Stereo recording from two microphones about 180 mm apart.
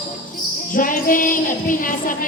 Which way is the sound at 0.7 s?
50° left (ahead or behind).